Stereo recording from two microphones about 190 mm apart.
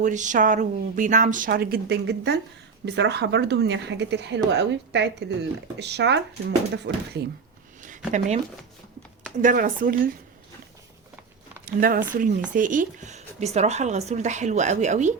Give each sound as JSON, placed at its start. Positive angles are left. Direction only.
{"t": 0.0, "sound": "a woman's voice", "side_deg": -40}
{"t": 7.8, "sound": "a sound", "side_deg": -40}
{"t": 9.4, "sound": "a woman's voice", "side_deg": -45}
{"t": 11.6, "sound": "a woman's voice", "side_deg": -50}